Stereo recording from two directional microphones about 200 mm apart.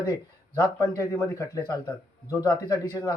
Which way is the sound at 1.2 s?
15° left (ahead or behind).